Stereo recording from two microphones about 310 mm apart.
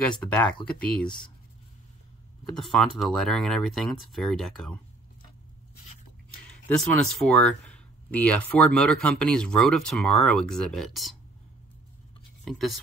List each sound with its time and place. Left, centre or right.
0.0 s speech: centre
2.5 s speech: centre
6.7 s speech: centre
12.4 s speech: centre